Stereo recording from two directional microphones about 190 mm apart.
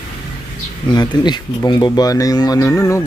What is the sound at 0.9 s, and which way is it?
Speech, 20° left (ahead or behind).